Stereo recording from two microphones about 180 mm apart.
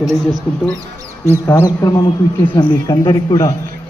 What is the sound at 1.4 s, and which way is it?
Speech, 20° left (ahead or behind).